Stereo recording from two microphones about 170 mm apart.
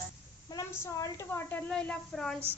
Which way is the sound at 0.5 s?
20° left (ahead or behind).